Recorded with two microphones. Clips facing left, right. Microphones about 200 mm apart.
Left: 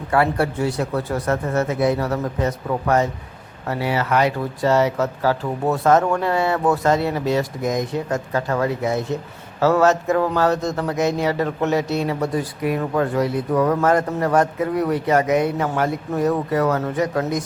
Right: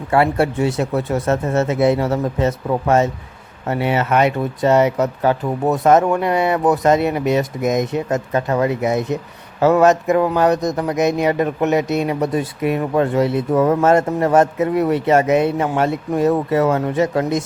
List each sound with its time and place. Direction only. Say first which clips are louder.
0.1 s a man's voice: right 3 dB; 25° right (ahead or behind)